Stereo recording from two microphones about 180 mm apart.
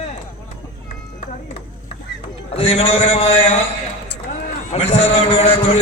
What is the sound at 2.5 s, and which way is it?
A man's voice, 35° left (ahead or behind).